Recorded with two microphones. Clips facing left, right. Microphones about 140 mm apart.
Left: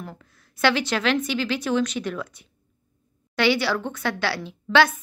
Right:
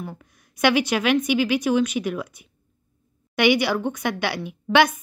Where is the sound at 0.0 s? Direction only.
15° right (ahead or behind).